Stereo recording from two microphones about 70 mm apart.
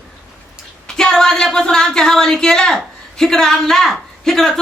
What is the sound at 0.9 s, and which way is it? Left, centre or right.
Speech, centre.